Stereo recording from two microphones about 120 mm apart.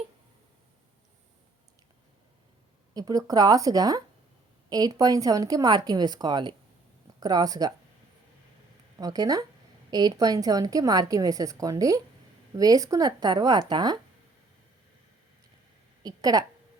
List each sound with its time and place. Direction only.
2.9 s speech: 30° right (ahead or behind)
9.0 s a woman's voice: 30° right (ahead or behind)
16.0 s speech: 30° right (ahead or behind)